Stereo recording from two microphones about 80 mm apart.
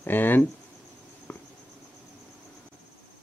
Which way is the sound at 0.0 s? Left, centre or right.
Left.